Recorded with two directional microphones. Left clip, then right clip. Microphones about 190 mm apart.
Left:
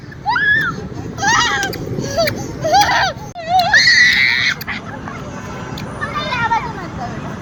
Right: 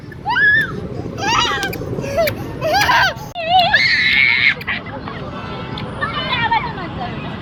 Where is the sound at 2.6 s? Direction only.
35° right (ahead or behind).